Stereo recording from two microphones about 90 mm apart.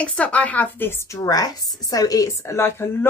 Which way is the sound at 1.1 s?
40° left (ahead or behind).